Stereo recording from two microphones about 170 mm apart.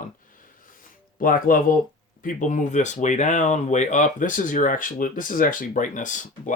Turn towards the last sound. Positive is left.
turn(degrees=45)  # may be behind; listen again after turning